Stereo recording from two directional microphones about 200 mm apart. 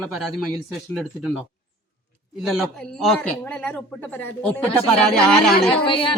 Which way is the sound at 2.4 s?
Centre (ahead or behind).